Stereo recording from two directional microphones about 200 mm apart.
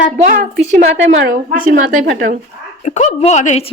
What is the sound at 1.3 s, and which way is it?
Speech, 45° right (ahead or behind).